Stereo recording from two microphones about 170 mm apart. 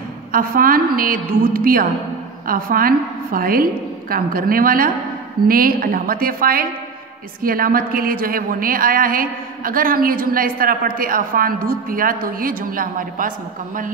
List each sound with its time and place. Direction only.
0.3 s a woman's voice: 55° right (ahead or behind)